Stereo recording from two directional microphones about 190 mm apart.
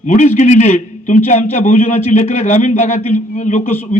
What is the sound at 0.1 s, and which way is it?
A man's voice, 40° left (ahead or behind).